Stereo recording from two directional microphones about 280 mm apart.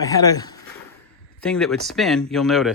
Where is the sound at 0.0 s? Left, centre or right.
Centre.